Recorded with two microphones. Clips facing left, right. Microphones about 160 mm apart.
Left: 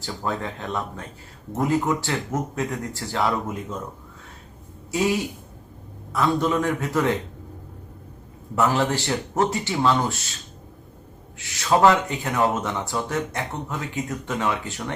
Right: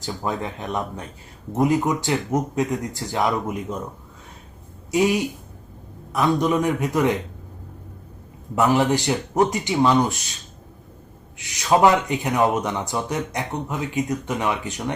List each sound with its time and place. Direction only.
0.0 s speech: 15° right (ahead or behind)
4.9 s speech: 15° right (ahead or behind)
8.5 s speech: 15° right (ahead or behind)
11.3 s speech: 15° right (ahead or behind)